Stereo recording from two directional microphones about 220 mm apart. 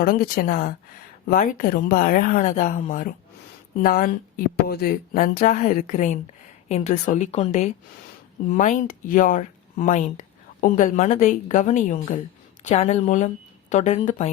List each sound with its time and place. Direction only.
0.0 s a woman's voice: 40° left (ahead or behind)